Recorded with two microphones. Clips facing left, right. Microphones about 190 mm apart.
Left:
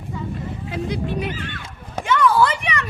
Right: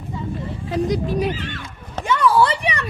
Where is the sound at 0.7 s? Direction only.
40° right (ahead or behind).